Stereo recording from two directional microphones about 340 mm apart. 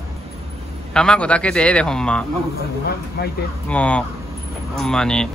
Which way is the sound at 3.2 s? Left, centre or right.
Left.